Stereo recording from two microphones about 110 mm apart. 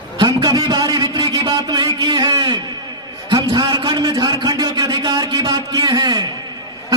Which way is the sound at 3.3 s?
40° right (ahead or behind).